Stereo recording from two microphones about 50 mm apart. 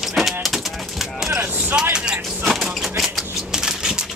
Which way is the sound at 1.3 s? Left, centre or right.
Right.